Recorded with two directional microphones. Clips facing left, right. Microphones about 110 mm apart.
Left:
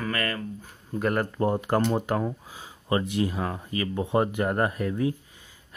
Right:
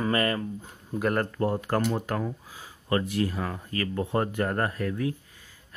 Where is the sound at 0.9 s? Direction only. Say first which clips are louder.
Even; centre (ahead or behind).